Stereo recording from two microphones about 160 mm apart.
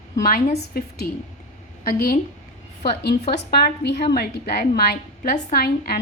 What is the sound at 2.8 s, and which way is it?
A woman's voice, 90° left.